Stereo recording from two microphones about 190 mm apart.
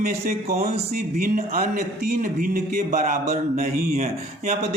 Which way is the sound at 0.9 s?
50° right (ahead or behind).